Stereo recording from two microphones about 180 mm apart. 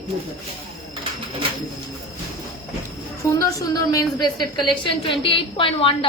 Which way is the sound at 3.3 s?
20° left (ahead or behind).